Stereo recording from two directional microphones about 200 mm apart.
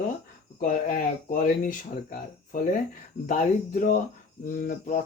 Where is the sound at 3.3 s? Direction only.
40° left (ahead or behind).